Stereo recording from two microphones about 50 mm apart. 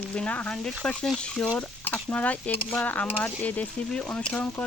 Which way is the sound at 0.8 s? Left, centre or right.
Left.